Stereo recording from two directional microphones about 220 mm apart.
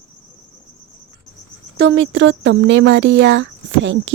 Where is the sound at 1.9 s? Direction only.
55° right (ahead or behind).